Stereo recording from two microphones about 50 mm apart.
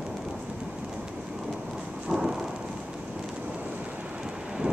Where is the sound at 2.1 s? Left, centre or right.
Centre.